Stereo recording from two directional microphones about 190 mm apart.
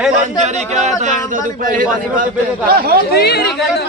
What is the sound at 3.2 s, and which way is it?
Speech, 60° left (ahead or behind).